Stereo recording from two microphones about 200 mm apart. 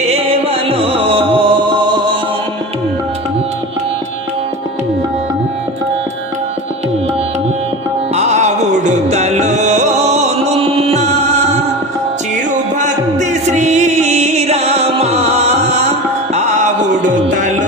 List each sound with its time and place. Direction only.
0.1 s music: 30° right (ahead or behind)
8.1 s music: 35° right (ahead or behind)
12.8 s music: 35° right (ahead or behind)